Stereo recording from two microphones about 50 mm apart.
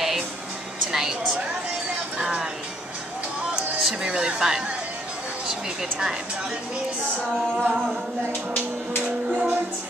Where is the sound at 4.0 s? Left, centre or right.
Centre.